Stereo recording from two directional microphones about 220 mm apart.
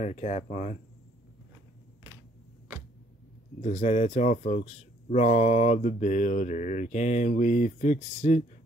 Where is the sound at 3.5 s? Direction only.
30° left (ahead or behind).